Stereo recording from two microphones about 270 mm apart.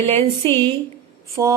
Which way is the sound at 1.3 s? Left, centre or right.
Centre.